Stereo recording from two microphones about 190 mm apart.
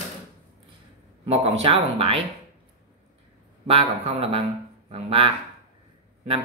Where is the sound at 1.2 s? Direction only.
30° right (ahead or behind).